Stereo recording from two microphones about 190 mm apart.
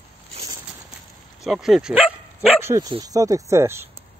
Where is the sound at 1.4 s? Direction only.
Centre (ahead or behind).